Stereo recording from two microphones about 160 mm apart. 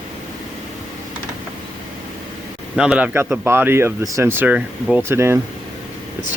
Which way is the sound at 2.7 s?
5° right (ahead or behind).